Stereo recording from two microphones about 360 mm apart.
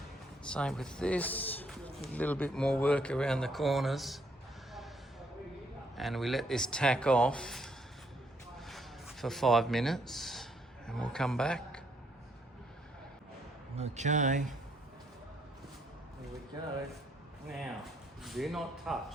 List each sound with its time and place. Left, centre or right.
0.4 s a man's voice: centre
6.0 s a man's voice: centre
8.6 s a sound: centre
13.7 s speech: centre
18.2 s a man's voice: centre